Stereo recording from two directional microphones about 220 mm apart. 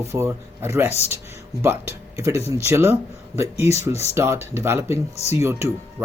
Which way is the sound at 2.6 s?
10° right (ahead or behind).